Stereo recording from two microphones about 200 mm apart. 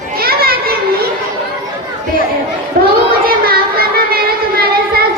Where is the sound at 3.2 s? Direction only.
50° right (ahead or behind).